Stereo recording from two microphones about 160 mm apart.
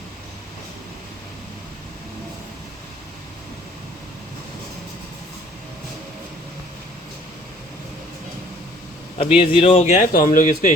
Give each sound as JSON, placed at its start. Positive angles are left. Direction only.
{"t": 9.1, "sound": "speech", "side_deg": 35}
{"t": 10.1, "sound": "speech", "side_deg": 60}